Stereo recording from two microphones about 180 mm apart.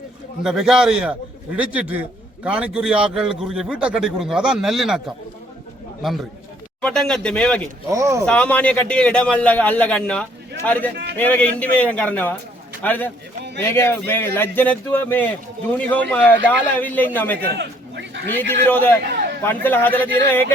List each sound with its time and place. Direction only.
0.4 s a man's voice: 5° right (ahead or behind)
6.8 s a man's voice: 5° left (ahead or behind)
7.9 s a man's voice: 15° right (ahead or behind)
8.2 s a man's voice: 5° left (ahead or behind)
17.6 s a man's voice: 75° right (ahead or behind)
18.3 s a man's voice: 10° left (ahead or behind)